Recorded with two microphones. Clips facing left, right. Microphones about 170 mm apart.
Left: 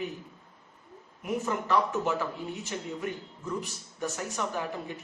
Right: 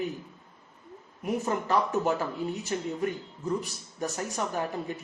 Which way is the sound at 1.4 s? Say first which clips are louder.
Even; 40° right (ahead or behind).